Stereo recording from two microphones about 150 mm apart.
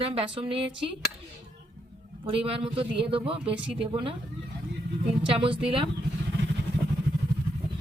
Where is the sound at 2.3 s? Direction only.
40° right (ahead or behind).